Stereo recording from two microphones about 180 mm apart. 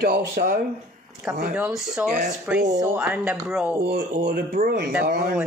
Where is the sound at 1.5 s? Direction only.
5° right (ahead or behind).